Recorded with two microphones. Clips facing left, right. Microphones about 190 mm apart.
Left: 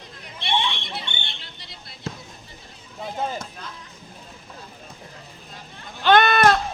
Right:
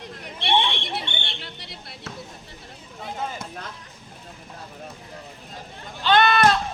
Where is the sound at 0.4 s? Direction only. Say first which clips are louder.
Right 3 dB; 60° right (ahead or behind).